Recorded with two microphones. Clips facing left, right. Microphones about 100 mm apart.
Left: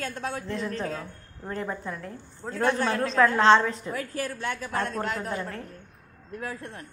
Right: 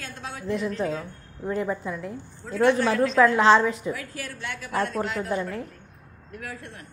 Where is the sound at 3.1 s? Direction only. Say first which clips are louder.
Right 1 dB; 10° right (ahead or behind).